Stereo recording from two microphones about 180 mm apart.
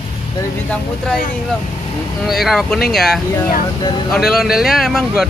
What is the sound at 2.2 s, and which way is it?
Speech, centre (ahead or behind).